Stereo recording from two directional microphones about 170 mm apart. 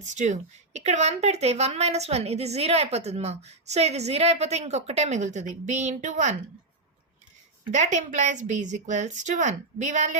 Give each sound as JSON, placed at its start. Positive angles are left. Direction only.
{"t": 0.0, "sound": "a woman's voice", "side_deg": -45}
{"t": 7.7, "sound": "a woman's voice", "side_deg": -45}